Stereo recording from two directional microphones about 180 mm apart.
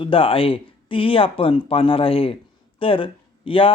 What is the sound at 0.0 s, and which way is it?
Speech, 30° left (ahead or behind).